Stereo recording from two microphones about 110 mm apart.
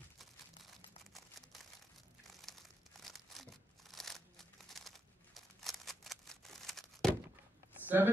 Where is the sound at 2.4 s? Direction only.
Centre (ahead or behind).